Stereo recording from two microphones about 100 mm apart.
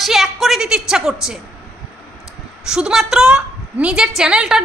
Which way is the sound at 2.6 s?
5° right (ahead or behind).